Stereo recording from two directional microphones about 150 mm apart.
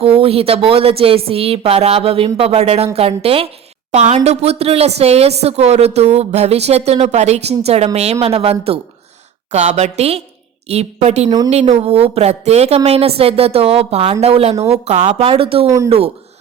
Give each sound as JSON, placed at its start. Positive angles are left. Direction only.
{"t": 0.0, "sound": "a woman's voice", "side_deg": -40}